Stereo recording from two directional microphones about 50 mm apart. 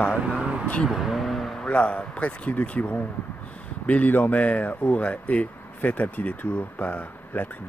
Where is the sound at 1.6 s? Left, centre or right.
Left.